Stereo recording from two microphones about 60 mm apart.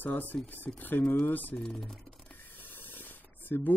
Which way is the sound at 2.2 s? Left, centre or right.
Left.